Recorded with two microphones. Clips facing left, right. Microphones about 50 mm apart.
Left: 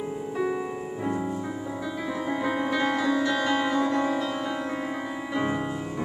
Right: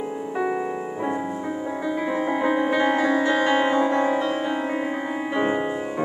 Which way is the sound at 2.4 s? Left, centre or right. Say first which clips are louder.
Right 5 dB; right.